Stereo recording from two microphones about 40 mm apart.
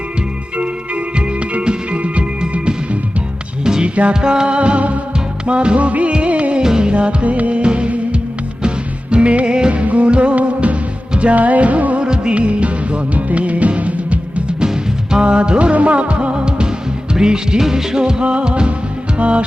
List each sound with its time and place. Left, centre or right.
0.5 s music: right
3.8 s music: right
4.1 s music: centre
6.6 s music: centre; by 12.0 s right
12.0 s music: right
14.6 s music: right